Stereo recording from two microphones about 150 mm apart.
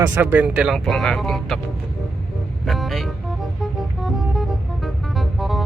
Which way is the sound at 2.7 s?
Centre (ahead or behind).